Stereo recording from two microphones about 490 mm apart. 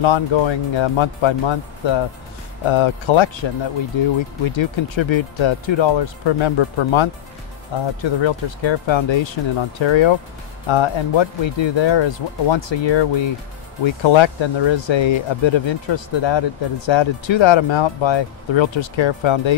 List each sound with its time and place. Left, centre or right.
0.0 s speech: left